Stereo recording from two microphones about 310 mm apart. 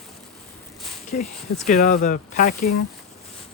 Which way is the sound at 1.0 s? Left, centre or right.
Left.